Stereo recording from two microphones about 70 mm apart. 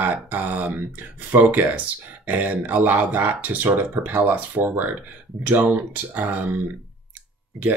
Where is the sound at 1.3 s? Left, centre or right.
Right.